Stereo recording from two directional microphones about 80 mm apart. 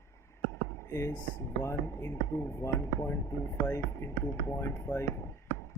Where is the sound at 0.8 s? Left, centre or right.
Left.